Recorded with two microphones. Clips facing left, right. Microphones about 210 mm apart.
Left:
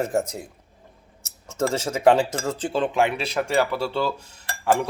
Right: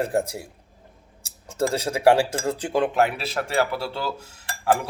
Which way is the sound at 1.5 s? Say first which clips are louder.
Even; 15° right (ahead or behind).